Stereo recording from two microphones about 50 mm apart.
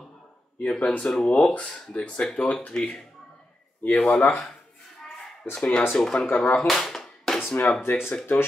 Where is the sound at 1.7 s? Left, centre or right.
Centre.